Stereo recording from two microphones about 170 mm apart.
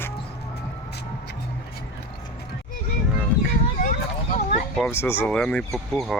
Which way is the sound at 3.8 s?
50° left (ahead or behind).